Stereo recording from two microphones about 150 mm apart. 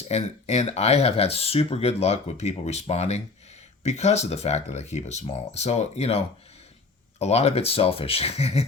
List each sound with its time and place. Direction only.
0.1 s speech: 45° left (ahead or behind)